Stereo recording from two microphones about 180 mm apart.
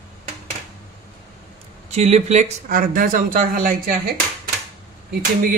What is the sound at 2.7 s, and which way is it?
A man's voice, 50° right (ahead or behind).